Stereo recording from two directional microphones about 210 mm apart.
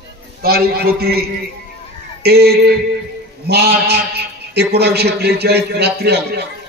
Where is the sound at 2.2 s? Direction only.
50° right (ahead or behind).